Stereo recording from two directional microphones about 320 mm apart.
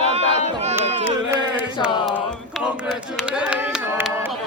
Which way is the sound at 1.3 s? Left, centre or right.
Centre.